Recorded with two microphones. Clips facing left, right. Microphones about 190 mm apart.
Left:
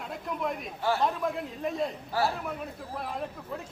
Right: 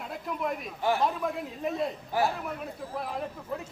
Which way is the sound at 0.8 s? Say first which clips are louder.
Right 1 dB; 15° right (ahead or behind).